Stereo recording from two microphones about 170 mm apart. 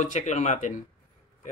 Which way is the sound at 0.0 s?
45° left (ahead or behind).